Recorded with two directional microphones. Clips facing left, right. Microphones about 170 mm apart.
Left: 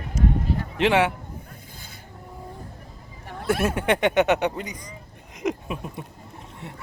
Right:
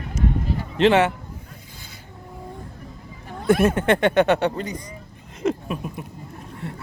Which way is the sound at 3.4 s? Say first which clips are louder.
Right 6 dB; 5° left (ahead or behind).